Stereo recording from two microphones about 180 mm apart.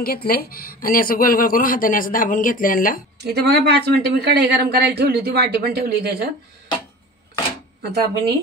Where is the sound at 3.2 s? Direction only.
65° right (ahead or behind).